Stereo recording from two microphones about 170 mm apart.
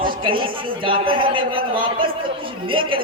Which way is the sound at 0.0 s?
30° right (ahead or behind).